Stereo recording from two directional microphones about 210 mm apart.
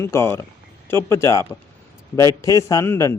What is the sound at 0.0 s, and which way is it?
A man's voice, 10° left (ahead or behind).